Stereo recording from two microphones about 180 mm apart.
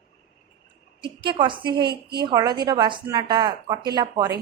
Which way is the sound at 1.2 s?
25° right (ahead or behind).